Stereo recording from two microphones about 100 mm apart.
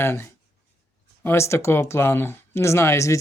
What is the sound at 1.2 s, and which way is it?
Speech, 25° left (ahead or behind).